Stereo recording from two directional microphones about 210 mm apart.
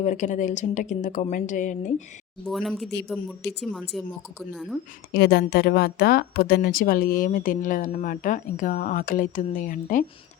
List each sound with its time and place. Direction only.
0.0 s speech: 35° left (ahead or behind)
2.5 s speech: centre (ahead or behind)
5.1 s speech: 50° left (ahead or behind)